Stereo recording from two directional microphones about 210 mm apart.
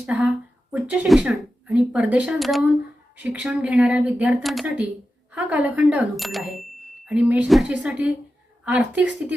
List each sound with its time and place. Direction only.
0.0 s a woman's voice: 5° right (ahead or behind)